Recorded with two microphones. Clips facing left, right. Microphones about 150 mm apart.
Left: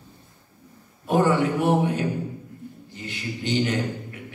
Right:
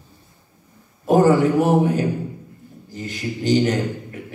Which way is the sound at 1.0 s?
40° right (ahead or behind).